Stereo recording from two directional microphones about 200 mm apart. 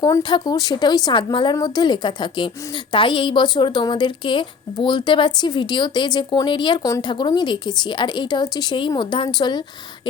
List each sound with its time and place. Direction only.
0.0 s a woman's voice: 20° left (ahead or behind)